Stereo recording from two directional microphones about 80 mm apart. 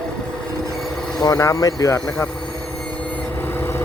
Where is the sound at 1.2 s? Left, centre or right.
Left.